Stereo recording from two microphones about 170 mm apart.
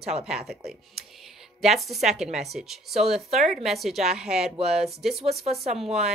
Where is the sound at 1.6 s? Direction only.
Centre (ahead or behind).